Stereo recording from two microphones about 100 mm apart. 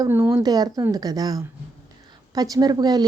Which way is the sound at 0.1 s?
25° right (ahead or behind).